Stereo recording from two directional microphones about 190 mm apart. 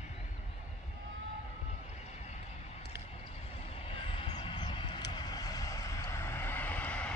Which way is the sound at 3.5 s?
30° left (ahead or behind).